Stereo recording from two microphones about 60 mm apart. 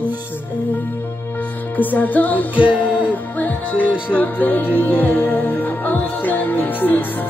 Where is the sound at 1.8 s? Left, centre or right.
Left.